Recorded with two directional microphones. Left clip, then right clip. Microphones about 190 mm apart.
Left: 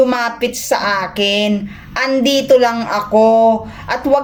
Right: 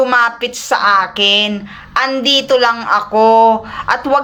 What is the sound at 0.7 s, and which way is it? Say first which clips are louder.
Speech: right 6 dB; 45° right (ahead or behind).